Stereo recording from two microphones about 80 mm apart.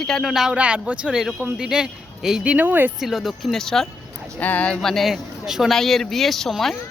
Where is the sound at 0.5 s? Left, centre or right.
Centre.